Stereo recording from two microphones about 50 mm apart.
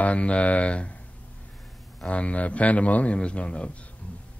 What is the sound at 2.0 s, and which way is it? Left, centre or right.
Speech, left.